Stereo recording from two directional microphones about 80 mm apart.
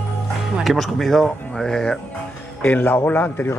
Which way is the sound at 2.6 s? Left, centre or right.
Left.